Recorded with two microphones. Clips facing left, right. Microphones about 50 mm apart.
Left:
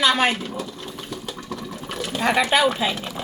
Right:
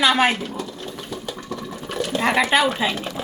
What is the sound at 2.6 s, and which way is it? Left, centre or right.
Speech, centre.